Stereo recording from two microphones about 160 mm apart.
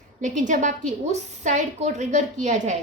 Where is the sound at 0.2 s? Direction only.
50° right (ahead or behind).